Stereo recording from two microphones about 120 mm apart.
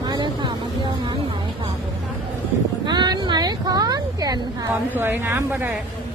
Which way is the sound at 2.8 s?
40° right (ahead or behind).